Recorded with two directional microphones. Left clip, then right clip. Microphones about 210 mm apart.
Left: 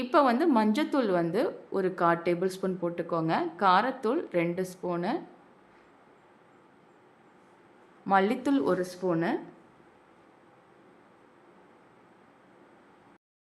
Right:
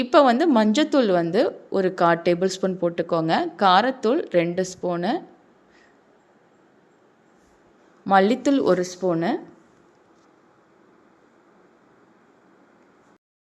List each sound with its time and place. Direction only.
0.0 s a woman's voice: 25° right (ahead or behind)
8.0 s a woman's voice: 20° right (ahead or behind)